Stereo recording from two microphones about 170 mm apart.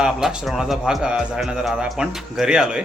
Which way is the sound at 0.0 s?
5° right (ahead or behind).